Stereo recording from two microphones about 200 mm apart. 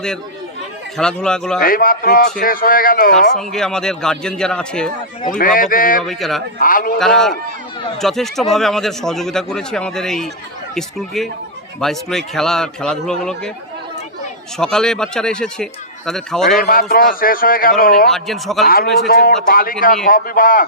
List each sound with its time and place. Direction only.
0.9 s speech: 5° left (ahead or behind)
1.6 s a man's voice: 45° left (ahead or behind)
3.5 s speech: 5° left (ahead or behind)
5.4 s a man's voice: 45° left (ahead or behind)
6.1 s speech: centre (ahead or behind)
6.6 s a man's voice: 45° left (ahead or behind)
7.0 s speech: centre (ahead or behind)
14.6 s speech: 5° left (ahead or behind)
16.5 s a man's voice: 45° left (ahead or behind)
18.1 s speech: centre (ahead or behind)
19.0 s a man's voice: 50° left (ahead or behind)